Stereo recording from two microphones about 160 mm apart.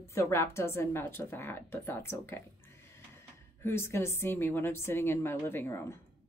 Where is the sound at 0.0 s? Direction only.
15° left (ahead or behind).